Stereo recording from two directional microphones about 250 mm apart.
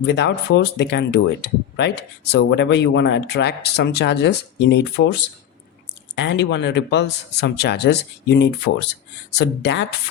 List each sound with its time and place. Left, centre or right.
0.0 s speech: left